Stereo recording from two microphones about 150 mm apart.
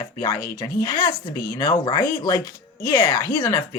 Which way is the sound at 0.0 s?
25° left (ahead or behind).